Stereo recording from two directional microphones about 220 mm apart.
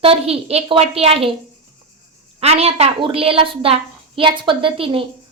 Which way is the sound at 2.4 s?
25° right (ahead or behind).